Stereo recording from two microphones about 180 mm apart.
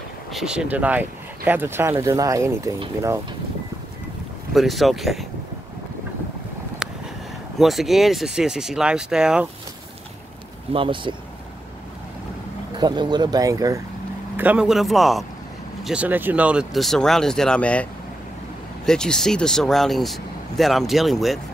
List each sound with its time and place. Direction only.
0.3 s speech: 5° right (ahead or behind)
4.6 s speech: centre (ahead or behind)
7.5 s speech: centre (ahead or behind)
10.7 s speech: 30° right (ahead or behind)
12.7 s speech: 25° right (ahead or behind)
14.3 s speech: 10° right (ahead or behind); by 17.8 s 5° left (ahead or behind)
18.9 s speech: 5° left (ahead or behind)